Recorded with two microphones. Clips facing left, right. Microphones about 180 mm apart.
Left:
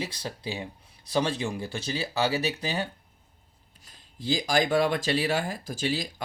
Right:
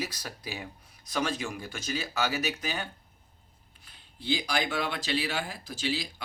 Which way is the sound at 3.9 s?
40° left (ahead or behind).